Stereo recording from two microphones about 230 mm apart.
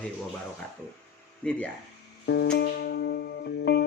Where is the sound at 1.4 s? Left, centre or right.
Centre.